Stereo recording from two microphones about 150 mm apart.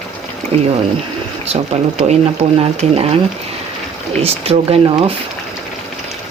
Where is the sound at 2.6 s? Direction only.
40° right (ahead or behind).